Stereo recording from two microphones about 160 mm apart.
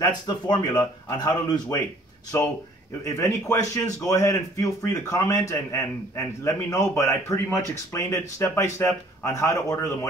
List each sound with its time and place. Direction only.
0.0 s a man's voice: 25° left (ahead or behind)